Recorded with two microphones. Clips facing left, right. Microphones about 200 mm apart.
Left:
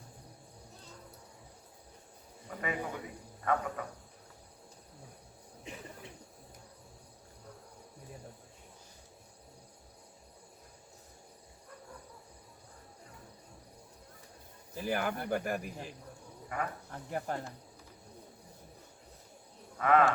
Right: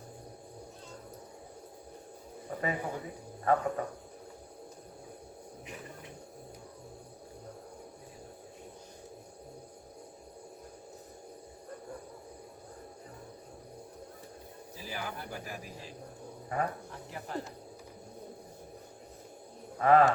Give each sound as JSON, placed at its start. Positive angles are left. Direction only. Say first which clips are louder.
{"t": 2.6, "sound": "cricket", "louder": "right 2 dB", "side_deg": -35}
{"t": 14.8, "sound": "speech", "louder": "left 7 dB", "side_deg": 55}
{"t": 16.5, "sound": "cricket", "louder": "right 4 dB", "side_deg": -30}
{"t": 17.1, "sound": "speech", "louder": "left 8 dB", "side_deg": 50}
{"t": 19.8, "sound": "cricket", "louder": "right 3 dB", "side_deg": -35}